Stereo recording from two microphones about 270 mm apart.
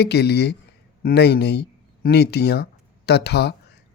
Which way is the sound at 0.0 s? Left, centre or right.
Left.